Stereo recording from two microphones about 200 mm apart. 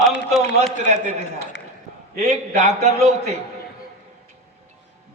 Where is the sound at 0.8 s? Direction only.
35° right (ahead or behind).